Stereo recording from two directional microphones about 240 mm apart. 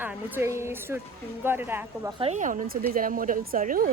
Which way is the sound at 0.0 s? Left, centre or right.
Centre.